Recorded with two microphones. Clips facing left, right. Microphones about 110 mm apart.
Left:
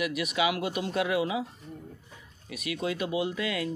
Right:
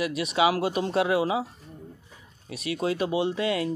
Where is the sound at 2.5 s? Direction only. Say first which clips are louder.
Right 4 dB; 30° right (ahead or behind).